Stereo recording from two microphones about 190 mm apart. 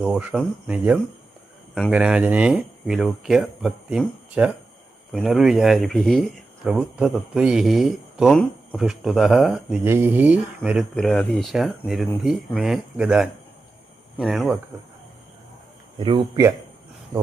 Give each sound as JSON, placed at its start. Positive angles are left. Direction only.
{"t": 0.0, "sound": "speech", "side_deg": -5}
{"t": 16.0, "sound": "speech", "side_deg": -25}